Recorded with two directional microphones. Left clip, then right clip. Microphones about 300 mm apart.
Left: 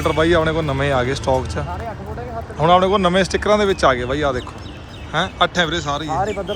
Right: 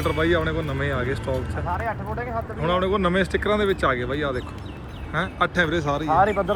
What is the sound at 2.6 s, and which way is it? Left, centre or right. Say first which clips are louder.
Speech: left 9 dB; centre.